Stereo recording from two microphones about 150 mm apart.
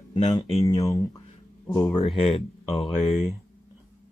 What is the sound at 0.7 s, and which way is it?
Speech, 25° left (ahead or behind).